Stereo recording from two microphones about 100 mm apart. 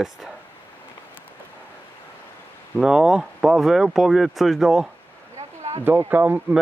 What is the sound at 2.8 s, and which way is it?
Speech, 5° right (ahead or behind).